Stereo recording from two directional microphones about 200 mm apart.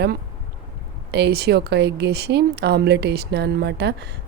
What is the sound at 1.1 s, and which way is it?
Speech, 55° right (ahead or behind).